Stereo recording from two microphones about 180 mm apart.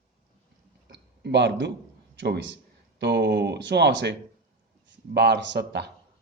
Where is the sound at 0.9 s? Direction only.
70° right (ahead or behind).